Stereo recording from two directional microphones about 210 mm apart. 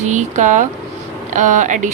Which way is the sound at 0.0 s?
35° right (ahead or behind).